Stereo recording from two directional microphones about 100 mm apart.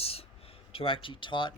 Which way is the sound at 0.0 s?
80° left.